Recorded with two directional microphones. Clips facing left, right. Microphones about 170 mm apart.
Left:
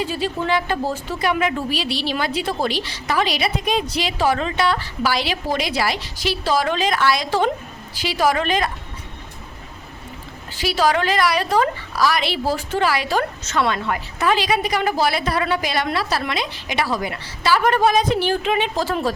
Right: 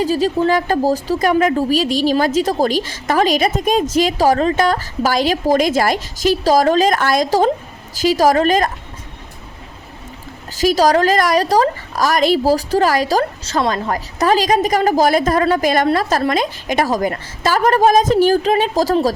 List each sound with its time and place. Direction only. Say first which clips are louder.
0.0 s a woman's voice: right 8 dB; 40° right (ahead or behind)
10.5 s a woman's voice: right 6 dB; 40° right (ahead or behind)